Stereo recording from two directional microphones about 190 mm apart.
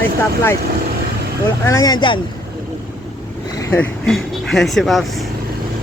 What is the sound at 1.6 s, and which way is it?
Speech, 15° left (ahead or behind).